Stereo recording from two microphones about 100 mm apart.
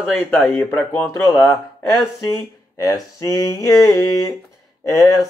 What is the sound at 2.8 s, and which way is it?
Speech, 35° left (ahead or behind).